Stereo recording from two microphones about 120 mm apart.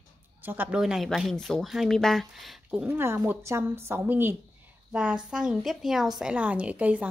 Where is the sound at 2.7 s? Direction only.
15° right (ahead or behind).